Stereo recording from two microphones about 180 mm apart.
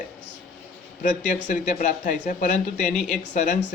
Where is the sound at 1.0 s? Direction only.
40° left (ahead or behind).